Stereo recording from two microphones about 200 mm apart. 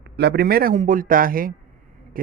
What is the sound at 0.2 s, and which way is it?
Speech, 55° right (ahead or behind).